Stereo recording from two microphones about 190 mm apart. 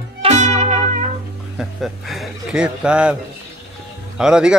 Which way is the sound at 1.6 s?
Centre (ahead or behind).